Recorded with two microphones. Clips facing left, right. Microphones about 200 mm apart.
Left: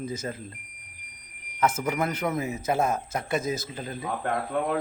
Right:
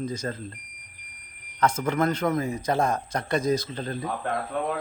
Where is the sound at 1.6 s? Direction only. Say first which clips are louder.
Right 2 dB; 5° left (ahead or behind).